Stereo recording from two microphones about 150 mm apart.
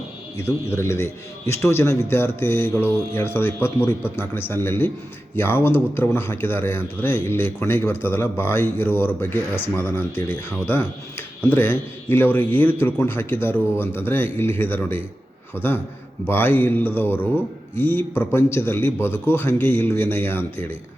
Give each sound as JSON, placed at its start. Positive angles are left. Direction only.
{"t": 0.8, "sound": "speech", "side_deg": 15}
{"t": 16.2, "sound": "speech", "side_deg": 15}